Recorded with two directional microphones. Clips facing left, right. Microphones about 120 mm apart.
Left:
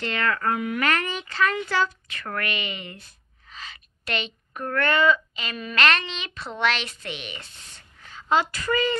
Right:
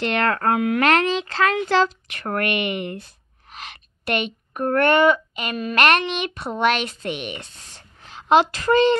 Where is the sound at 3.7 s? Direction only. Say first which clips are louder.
Right 6 dB; 55° right (ahead or behind).